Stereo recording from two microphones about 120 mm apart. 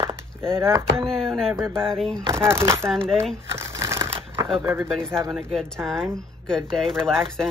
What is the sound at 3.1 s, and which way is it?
Speech, 5° left (ahead or behind).